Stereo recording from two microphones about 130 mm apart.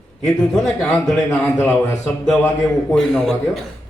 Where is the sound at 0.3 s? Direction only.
10° left (ahead or behind).